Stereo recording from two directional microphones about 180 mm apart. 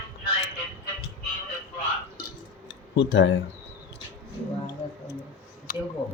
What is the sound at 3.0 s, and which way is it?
Speech, 90° left.